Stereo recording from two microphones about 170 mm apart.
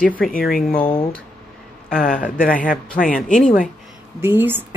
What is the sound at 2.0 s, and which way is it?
Speech, 55° left (ahead or behind).